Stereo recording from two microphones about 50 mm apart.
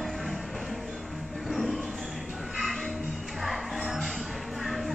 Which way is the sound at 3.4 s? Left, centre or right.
Centre.